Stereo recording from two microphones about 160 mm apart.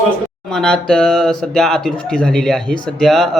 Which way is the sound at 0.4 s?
5° left (ahead or behind).